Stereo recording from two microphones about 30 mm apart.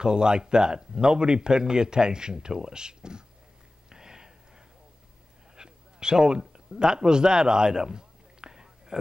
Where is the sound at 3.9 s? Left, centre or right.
Right.